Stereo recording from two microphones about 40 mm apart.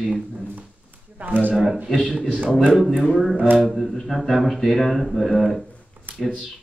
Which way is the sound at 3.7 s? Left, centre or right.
Centre.